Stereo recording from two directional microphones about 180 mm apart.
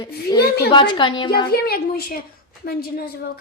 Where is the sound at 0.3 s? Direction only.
65° left (ahead or behind).